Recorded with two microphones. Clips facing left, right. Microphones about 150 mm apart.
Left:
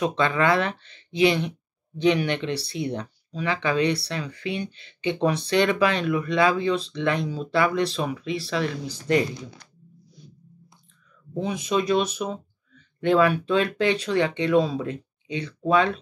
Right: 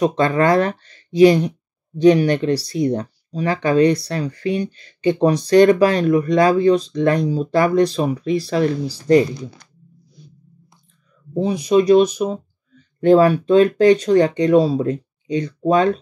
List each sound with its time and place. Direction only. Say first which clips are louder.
0.0 s speech: right 6 dB; 40° right (ahead or behind)
11.3 s speech: right 9 dB; 35° right (ahead or behind)